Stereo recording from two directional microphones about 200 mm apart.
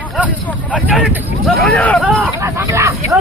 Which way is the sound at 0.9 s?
5° right (ahead or behind).